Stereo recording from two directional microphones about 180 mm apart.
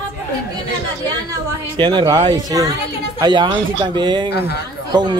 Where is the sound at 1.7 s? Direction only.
25° right (ahead or behind).